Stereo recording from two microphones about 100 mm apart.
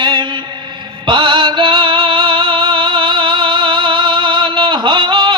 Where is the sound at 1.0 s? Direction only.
55° right (ahead or behind).